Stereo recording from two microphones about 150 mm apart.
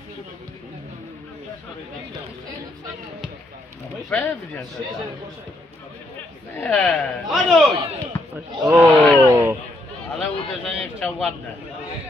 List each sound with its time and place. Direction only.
4.1 s speech: 15° left (ahead or behind)
6.5 s speech: 10° left (ahead or behind)
8.6 s speech: 10° right (ahead or behind)
9.0 s speech: 10° left (ahead or behind)
9.3 s speech: 20° right (ahead or behind)
10.1 s speech: centre (ahead or behind)